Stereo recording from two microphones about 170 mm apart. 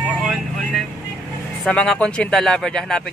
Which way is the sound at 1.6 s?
5° left (ahead or behind).